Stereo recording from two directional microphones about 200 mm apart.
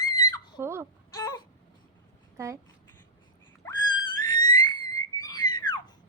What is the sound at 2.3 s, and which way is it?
Speech, 15° right (ahead or behind).